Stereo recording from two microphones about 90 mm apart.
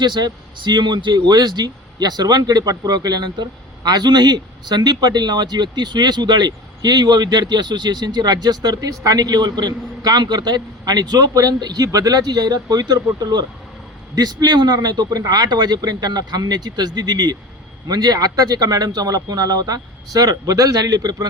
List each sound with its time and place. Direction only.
0.0 s speech: 55° right (ahead or behind)